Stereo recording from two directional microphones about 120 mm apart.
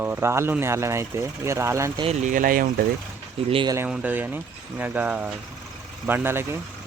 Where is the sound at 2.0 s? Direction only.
90° right.